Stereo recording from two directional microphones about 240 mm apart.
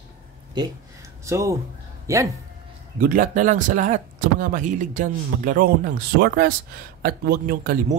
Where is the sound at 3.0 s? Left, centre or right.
Right.